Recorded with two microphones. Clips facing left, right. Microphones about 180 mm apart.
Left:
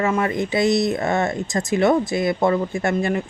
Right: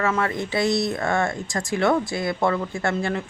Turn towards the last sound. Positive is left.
turn(degrees=15)  # may be behind; listen again after turning